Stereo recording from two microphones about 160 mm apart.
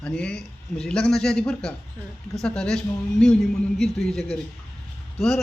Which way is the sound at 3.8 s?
Centre (ahead or behind).